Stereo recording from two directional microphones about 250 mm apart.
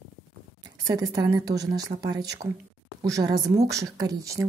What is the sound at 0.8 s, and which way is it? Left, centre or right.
A woman's voice, centre.